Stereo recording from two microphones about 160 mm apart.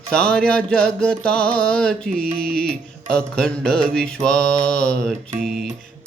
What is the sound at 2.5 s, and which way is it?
Mantra, 5° left (ahead or behind).